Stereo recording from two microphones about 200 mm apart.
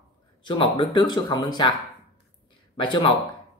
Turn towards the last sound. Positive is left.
turn(degrees=25)  # may be behind; listen again after turning